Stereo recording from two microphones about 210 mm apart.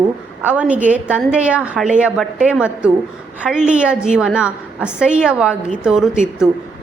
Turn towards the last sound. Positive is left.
turn(degrees=-5)  # may be behind; listen again after turning